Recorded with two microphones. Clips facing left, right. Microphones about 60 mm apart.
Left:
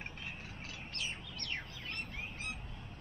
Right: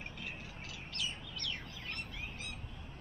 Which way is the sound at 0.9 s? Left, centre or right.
Left.